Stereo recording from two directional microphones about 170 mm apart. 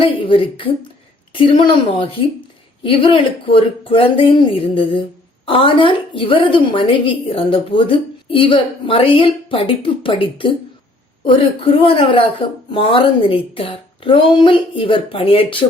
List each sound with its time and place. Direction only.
0.0 s a woman's voice: 30° left (ahead or behind)